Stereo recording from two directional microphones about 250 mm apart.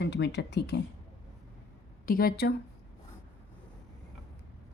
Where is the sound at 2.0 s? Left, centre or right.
Left.